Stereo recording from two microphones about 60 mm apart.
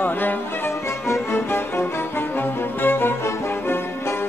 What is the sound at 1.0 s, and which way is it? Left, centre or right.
Music, left.